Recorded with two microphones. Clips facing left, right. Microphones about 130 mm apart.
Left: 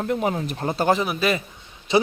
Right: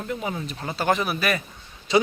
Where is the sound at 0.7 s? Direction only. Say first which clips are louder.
Left 2 dB; 25° left (ahead or behind).